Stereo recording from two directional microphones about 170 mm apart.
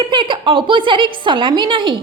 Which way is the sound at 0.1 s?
30° right (ahead or behind).